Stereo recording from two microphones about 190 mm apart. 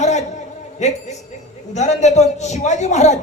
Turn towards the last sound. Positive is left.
turn(degrees=35)  # may be behind; listen again after turning